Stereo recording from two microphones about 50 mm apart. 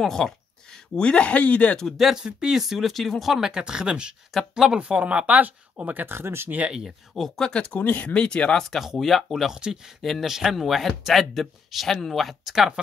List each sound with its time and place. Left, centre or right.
0.0 s speech: centre; by 1.8 s left
1.8 s speech: centre
2.1 s speech: centre
4.3 s speech: centre
4.7 s speech: right
6.0 s speech: right
7.3 s speech: centre
7.8 s speech: left
8.1 s speech: left
8.6 s speech: centre
9.5 s speech: centre